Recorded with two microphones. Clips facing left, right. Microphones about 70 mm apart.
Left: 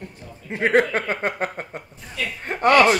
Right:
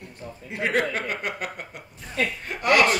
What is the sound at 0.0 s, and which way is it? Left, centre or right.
A man's voice, left.